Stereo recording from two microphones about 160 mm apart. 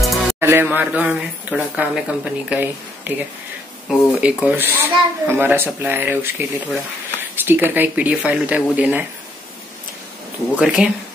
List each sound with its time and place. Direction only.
0.0 s music: centre (ahead or behind)
0.4 s speech: 15° right (ahead or behind)
7.3 s a sound: 10° right (ahead or behind)
7.7 s speech: 10° right (ahead or behind)
10.5 s speech: 5° right (ahead or behind)